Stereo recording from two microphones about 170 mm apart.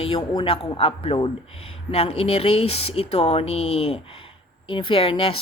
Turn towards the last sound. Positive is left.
turn(degrees=30)  # may be behind; listen again after turning